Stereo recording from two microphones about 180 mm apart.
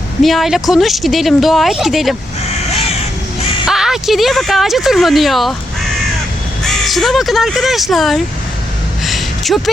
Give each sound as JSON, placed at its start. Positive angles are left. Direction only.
{"t": 0.2, "sound": "speech", "side_deg": 0}
{"t": 3.7, "sound": "speech", "side_deg": 0}
{"t": 6.8, "sound": "speech", "side_deg": 0}
{"t": 9.0, "sound": "a sound", "side_deg": 0}